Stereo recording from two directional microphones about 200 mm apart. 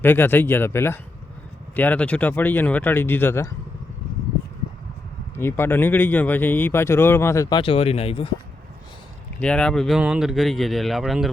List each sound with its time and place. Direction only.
0.0 s speech: 10° left (ahead or behind)
5.4 s speech: 10° left (ahead or behind)
7.6 s speech: 30° left (ahead or behind)
9.4 s speech: 5° left (ahead or behind)